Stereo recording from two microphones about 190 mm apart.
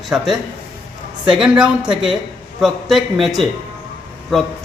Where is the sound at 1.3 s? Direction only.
5° right (ahead or behind).